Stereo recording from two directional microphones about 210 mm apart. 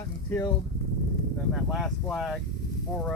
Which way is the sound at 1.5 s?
Centre (ahead or behind).